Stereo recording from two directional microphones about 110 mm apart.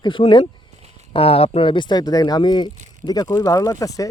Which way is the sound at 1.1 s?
60° left (ahead or behind).